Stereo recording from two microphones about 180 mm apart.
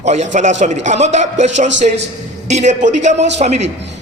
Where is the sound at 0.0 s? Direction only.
40° right (ahead or behind).